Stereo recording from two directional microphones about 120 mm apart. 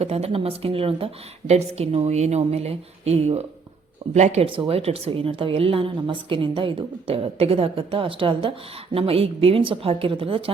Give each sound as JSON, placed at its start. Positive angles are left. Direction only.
{"t": 0.0, "sound": "a woman's voice", "side_deg": -60}
{"t": 4.1, "sound": "speech", "side_deg": -70}
{"t": 4.4, "sound": "a woman's voice", "side_deg": -45}